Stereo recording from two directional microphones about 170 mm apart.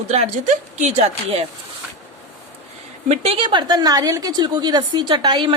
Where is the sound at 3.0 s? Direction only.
35° right (ahead or behind).